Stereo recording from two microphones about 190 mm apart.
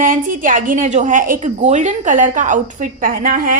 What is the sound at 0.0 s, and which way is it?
A woman's voice, 45° right (ahead or behind).